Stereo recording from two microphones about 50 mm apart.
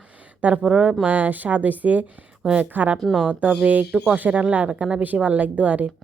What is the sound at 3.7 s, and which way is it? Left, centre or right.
Speech, right.